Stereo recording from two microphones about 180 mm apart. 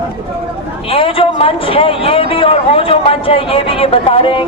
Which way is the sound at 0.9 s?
30° left (ahead or behind).